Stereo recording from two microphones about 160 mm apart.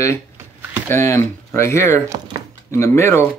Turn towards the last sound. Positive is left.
turn(degrees=15)  # may be behind; listen again after turning